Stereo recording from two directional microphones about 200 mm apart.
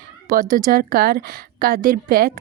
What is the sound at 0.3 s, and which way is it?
A woman's voice, 45° right (ahead or behind).